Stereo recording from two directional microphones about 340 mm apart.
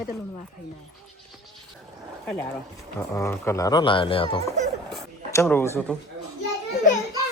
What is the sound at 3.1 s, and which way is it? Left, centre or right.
Speech, centre.